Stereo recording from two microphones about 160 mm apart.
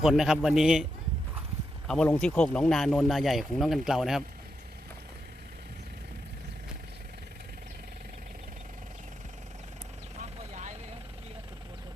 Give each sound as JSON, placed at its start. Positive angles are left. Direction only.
{"t": 0.0, "sound": "speech", "side_deg": 0}
{"t": 1.9, "sound": "speech", "side_deg": 5}
{"t": 10.2, "sound": "vehicle", "side_deg": -45}